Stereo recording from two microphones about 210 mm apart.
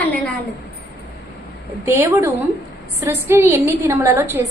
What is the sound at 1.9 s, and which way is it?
A woman's voice, 10° right (ahead or behind).